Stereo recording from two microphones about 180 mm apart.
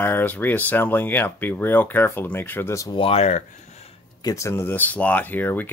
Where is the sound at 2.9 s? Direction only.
30° left (ahead or behind).